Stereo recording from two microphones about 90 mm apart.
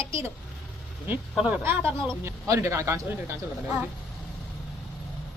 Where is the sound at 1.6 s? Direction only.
25° right (ahead or behind).